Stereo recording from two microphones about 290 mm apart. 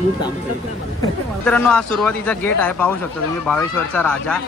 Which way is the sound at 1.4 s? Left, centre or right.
Centre.